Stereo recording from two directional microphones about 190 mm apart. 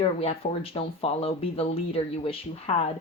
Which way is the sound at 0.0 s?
30° left (ahead or behind).